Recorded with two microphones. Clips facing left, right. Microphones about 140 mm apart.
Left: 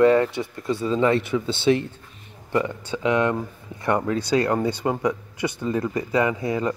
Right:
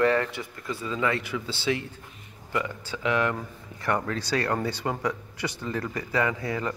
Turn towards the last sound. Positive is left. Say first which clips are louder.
# left 5 dB
turn(degrees=20)  # may be behind; listen again after turning